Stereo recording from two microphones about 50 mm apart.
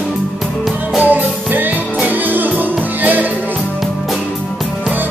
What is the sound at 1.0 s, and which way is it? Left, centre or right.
Music, right.